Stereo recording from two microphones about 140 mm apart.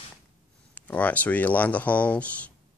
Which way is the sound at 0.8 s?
10° left (ahead or behind).